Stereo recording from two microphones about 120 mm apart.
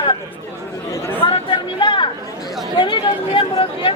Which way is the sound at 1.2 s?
45° left (ahead or behind).